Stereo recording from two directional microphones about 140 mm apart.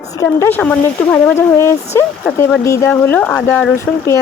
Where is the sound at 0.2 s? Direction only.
20° left (ahead or behind).